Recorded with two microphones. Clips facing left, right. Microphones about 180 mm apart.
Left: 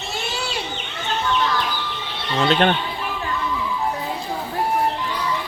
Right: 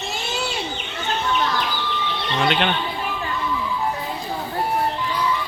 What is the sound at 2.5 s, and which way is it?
Speech, 40° left (ahead or behind).